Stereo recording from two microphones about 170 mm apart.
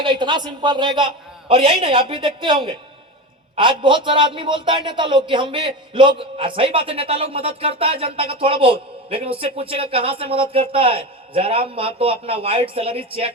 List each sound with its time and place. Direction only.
0.0 s a man's voice: 25° right (ahead or behind)